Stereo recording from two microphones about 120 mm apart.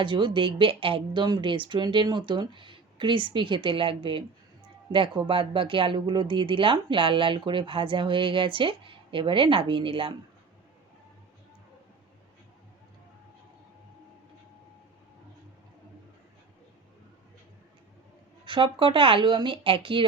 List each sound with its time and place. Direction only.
0.0 s speech: 45° right (ahead or behind)
18.4 s speech: 45° right (ahead or behind)